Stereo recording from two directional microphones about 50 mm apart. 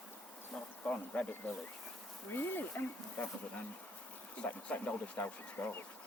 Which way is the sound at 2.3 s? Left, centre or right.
Left.